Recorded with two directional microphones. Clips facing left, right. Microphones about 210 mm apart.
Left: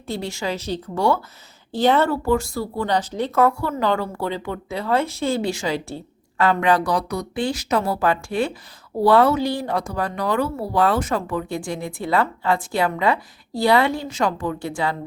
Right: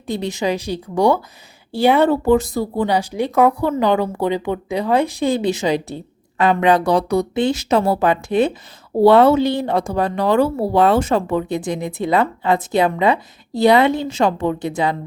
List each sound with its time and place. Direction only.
0.1 s speech: 20° right (ahead or behind)